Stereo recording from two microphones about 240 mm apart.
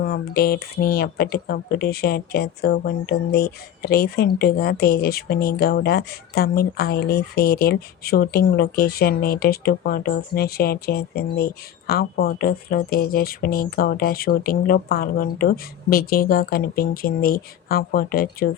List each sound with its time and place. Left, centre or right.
0.0 s speech: left